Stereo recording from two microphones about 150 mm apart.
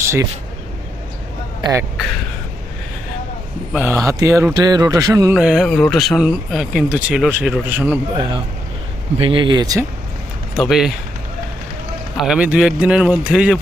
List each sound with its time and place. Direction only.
0.0 s a sound: 20° right (ahead or behind)
3.7 s a man's voice: 10° right (ahead or behind)
3.9 s a man's voice: 20° right (ahead or behind)
5.3 s a man's voice: 5° right (ahead or behind)
9.1 s speech: 35° right (ahead or behind)
10.5 s speech: 5° right (ahead or behind)
12.1 s speech: 5° right (ahead or behind)